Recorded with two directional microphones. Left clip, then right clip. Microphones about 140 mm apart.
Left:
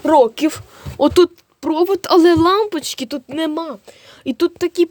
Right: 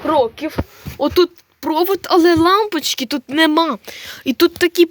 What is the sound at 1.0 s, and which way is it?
Speech, 30° left (ahead or behind).